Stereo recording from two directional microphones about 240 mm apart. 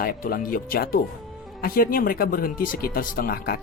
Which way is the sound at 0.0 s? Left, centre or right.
Left.